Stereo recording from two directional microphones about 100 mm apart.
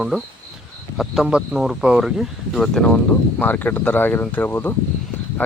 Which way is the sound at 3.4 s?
15° left (ahead or behind).